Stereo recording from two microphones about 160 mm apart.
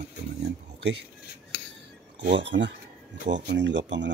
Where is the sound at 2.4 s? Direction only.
90° right.